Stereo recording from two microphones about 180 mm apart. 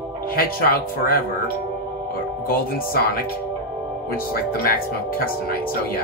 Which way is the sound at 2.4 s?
55° left (ahead or behind).